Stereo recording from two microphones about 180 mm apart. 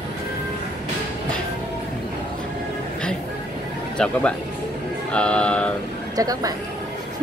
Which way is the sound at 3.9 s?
5° left (ahead or behind).